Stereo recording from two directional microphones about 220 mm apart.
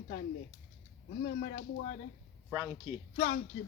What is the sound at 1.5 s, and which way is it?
Speech, 40° left (ahead or behind).